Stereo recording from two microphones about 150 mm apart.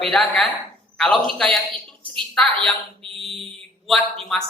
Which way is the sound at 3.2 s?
Centre (ahead or behind).